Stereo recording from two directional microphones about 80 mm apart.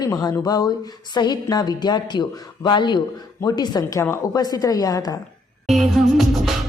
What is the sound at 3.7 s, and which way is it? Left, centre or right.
A woman's voice, left.